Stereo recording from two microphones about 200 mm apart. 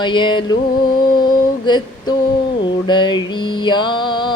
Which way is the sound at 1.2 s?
20° left (ahead or behind).